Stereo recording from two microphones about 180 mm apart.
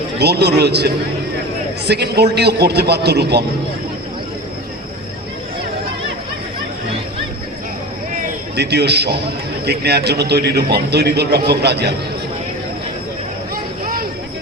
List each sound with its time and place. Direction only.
0.2 s a man's voice: 65° right (ahead or behind)
1.9 s a man's voice: 65° right (ahead or behind)
8.5 s a man's voice: 65° right (ahead or behind)